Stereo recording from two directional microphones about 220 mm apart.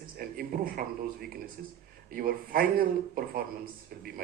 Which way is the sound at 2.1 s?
40° right (ahead or behind).